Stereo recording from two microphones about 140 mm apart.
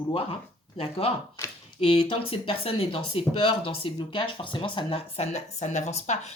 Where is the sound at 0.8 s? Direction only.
45° left (ahead or behind).